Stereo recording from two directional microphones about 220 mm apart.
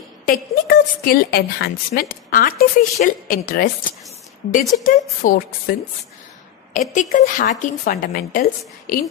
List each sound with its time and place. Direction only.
0.2 s a woman's voice: 40° left (ahead or behind)
4.8 s a woman's voice: 35° left (ahead or behind)